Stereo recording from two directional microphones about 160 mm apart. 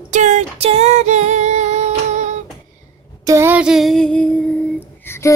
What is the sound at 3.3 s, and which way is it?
Female singing, 15° right (ahead or behind).